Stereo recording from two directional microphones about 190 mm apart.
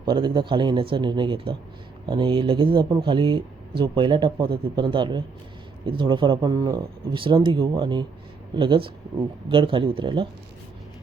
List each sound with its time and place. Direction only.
0.1 s speech: 25° right (ahead or behind)